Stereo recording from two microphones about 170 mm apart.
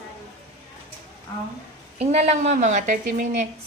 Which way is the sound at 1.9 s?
40° right (ahead or behind).